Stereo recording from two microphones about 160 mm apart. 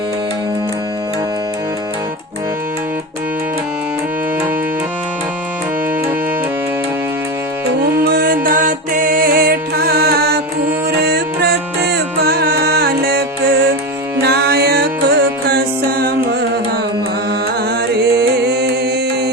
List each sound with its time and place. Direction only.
8.0 s music: 65° right (ahead or behind)
18.2 s music: 85° right